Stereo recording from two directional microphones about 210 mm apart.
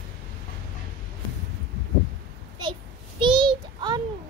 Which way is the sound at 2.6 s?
20° right (ahead or behind).